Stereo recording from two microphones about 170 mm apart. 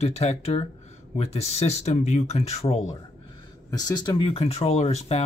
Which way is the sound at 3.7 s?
25° left (ahead or behind).